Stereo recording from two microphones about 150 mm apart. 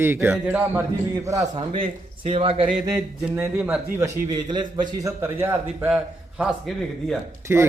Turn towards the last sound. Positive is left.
turn(degrees=-20)  # may be behind; listen again after turning